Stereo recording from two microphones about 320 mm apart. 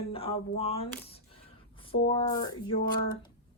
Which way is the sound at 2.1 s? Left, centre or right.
Centre.